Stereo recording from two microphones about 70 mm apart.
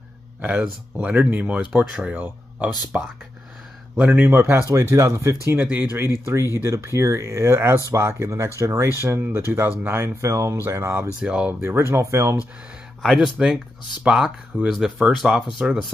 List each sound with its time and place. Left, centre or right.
0.4 s speech: right
4.3 s speech: right
6.2 s speech: right
11.1 s speech: centre
11.6 s speech: right
13.0 s speech: centre